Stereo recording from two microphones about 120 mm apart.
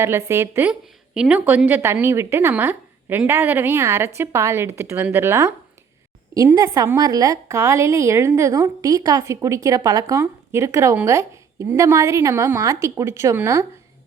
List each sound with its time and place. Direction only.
0.0 s a woman's voice: 20° right (ahead or behind)